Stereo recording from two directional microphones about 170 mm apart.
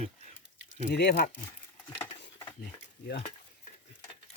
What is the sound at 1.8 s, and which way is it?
Patter, 10° left (ahead or behind).